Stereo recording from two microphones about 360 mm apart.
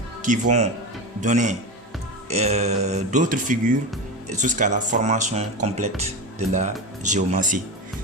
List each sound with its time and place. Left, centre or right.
0.2 s speech: right